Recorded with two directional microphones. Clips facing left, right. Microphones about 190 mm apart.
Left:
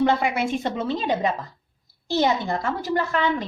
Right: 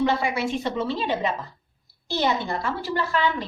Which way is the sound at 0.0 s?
50° left (ahead or behind).